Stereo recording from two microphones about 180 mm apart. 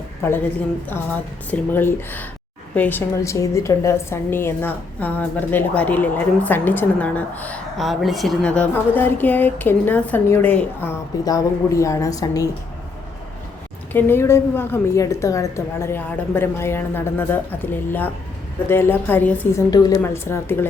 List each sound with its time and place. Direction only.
0.2 s a woman's voice: 10° left (ahead or behind)
1.5 s a woman's voice: 10° left (ahead or behind)
13.9 s a woman's voice: 15° left (ahead or behind)